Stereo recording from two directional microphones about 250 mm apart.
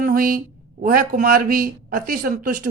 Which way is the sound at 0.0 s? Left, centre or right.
Right.